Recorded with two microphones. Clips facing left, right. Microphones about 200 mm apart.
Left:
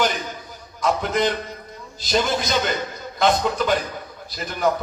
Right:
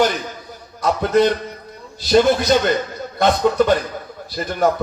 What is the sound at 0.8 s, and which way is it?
A man's voice, 65° right (ahead or behind).